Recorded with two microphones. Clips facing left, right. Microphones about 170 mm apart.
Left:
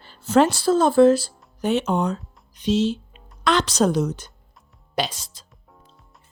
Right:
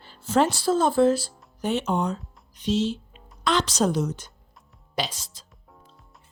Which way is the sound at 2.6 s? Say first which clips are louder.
Left 4 dB; 80° left.